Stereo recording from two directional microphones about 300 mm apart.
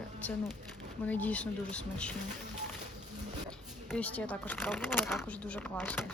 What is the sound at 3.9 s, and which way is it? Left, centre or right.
Speech, centre.